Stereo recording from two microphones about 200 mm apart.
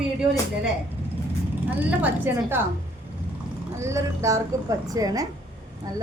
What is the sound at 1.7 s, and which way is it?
Speech, 10° right (ahead or behind).